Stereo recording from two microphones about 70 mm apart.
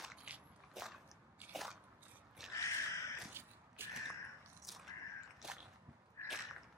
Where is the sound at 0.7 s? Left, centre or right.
Centre.